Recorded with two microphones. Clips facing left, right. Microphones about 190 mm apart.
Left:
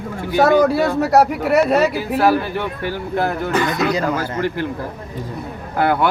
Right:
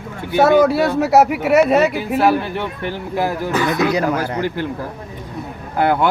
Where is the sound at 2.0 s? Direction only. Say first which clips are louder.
Even; 20° right (ahead or behind).